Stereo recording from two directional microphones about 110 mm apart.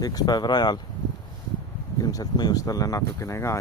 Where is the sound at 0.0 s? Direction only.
35° left (ahead or behind).